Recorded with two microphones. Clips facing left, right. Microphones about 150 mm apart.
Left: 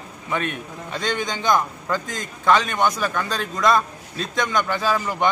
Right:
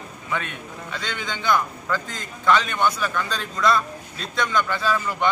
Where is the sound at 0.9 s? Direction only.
40° left (ahead or behind).